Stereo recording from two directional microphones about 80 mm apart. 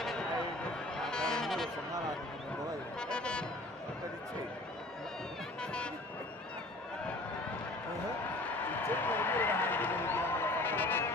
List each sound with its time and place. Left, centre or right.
0.9 s music: centre
3.0 s music: centre
5.6 s music: centre
8.9 s a sound: left